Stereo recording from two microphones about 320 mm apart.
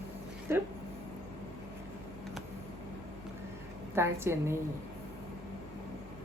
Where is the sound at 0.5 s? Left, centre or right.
Centre.